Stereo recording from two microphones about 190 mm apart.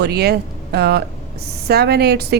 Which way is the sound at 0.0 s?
60° right (ahead or behind).